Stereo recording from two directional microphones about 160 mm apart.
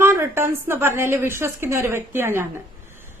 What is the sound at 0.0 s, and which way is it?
A woman's voice, 15° right (ahead or behind).